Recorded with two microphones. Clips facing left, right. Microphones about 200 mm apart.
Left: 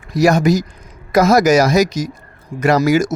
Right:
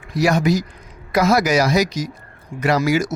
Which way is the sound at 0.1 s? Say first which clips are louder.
Left 4 dB; 45° left (ahead or behind).